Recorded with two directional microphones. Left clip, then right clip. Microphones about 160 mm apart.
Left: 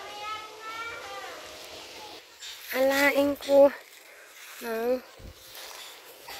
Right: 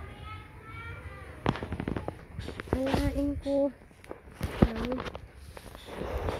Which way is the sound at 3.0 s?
70° left (ahead or behind).